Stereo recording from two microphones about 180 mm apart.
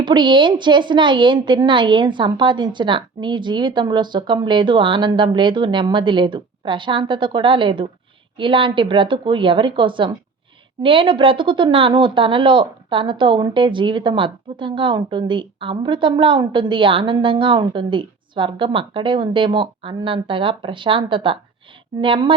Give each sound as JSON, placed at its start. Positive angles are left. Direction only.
{"t": 0.0, "sound": "speech", "side_deg": -25}